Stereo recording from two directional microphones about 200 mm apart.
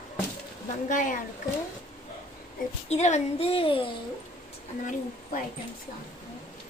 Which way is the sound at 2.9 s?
35° left (ahead or behind).